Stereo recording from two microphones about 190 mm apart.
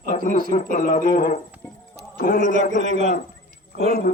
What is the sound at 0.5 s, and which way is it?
Speech, 40° left (ahead or behind).